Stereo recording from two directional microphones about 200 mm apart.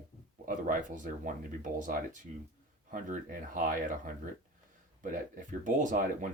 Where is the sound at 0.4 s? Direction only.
40° right (ahead or behind).